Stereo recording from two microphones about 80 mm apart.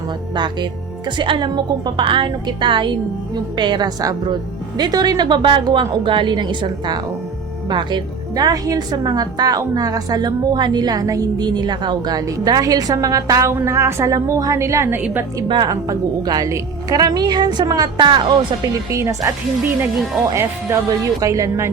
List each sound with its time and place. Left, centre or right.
0.3 s a woman's voice: right
1.2 s a woman's voice: right
3.3 s a woman's voice: right
13.5 s a woman's voice: right
14.9 s a woman's voice: right
15.4 s speech: right
15.7 s a woman's voice: right
18.6 s a woman's voice: right
20.3 s a woman's voice: right